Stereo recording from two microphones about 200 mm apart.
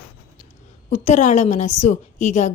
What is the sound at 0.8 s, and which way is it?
A woman's voice, 35° left (ahead or behind).